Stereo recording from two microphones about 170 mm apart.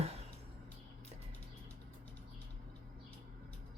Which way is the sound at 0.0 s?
40° right (ahead or behind).